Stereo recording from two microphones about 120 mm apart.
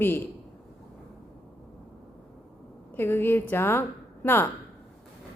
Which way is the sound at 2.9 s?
20° left (ahead or behind).